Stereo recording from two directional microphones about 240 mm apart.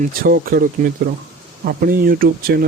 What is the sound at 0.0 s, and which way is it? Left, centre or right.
Speech, right.